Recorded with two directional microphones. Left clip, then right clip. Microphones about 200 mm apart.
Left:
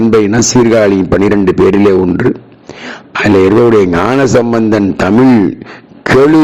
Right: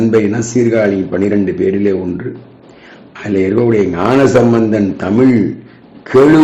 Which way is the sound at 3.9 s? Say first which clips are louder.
Left 1 dB; 40° left (ahead or behind).